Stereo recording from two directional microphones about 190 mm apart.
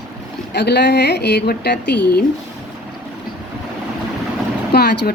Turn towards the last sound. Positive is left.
turn(degrees=55)  # may be behind; listen again after turning